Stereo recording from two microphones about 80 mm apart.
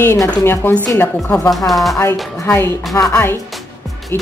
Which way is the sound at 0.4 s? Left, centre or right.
Left.